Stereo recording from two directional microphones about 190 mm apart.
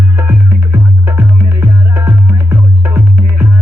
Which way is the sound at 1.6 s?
10° right (ahead or behind).